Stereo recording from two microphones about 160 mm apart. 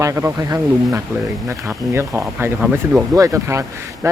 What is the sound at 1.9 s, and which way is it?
Speech, 15° right (ahead or behind).